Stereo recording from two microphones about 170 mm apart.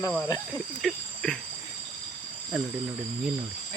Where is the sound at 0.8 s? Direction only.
5° left (ahead or behind).